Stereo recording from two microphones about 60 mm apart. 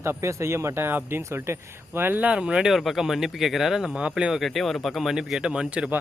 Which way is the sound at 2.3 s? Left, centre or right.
Centre.